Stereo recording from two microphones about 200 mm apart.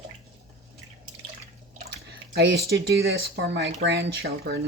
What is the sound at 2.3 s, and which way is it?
Speech, 55° right (ahead or behind).